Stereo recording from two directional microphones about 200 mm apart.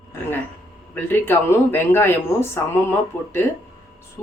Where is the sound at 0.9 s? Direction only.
10° left (ahead or behind).